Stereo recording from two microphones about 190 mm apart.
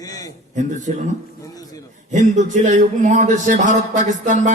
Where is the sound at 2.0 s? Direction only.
40° right (ahead or behind).